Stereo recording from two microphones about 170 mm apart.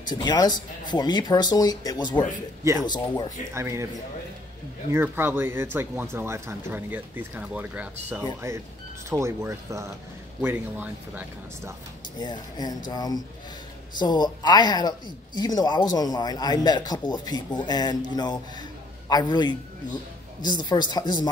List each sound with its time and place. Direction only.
0.1 s speech: 25° left (ahead or behind)
3.5 s speech: 15° right (ahead or behind)
4.9 s speech: 15° right (ahead or behind)
12.2 s speech: 25° left (ahead or behind)